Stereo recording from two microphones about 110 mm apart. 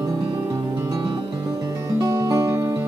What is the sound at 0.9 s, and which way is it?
Music, 40° right (ahead or behind).